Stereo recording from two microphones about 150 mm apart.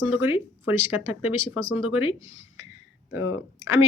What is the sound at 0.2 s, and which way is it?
Speech, 15° right (ahead or behind).